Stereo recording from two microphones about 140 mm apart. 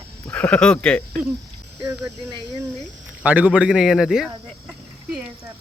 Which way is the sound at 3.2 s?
10° right (ahead or behind).